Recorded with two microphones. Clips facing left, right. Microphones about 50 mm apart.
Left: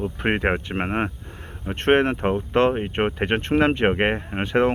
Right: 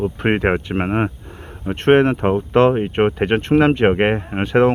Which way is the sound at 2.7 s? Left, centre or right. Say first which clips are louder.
Right 6 dB; centre.